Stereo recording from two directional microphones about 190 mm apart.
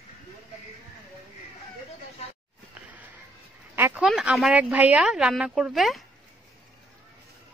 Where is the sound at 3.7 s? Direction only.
10° right (ahead or behind).